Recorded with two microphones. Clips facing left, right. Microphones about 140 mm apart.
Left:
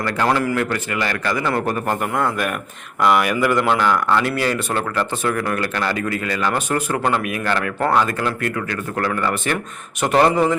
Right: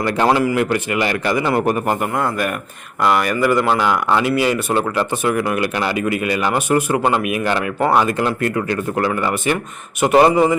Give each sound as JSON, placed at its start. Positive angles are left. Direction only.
{"t": 0.0, "sound": "speech", "side_deg": -20}
{"t": 2.0, "sound": "speech", "side_deg": -5}